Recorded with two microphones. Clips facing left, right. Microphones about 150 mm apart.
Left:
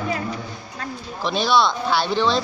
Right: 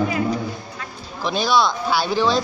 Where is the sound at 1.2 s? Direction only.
Centre (ahead or behind).